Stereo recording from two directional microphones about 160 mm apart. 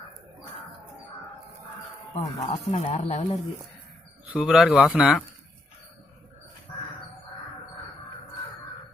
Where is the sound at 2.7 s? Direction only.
40° left (ahead or behind).